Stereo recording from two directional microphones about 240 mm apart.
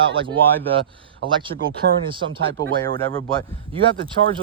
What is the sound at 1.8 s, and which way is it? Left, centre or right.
Speech, right.